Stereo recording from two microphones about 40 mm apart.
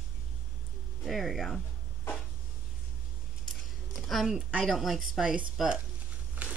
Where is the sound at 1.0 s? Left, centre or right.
Centre.